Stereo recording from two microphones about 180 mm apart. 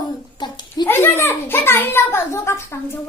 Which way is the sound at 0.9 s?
10° left (ahead or behind).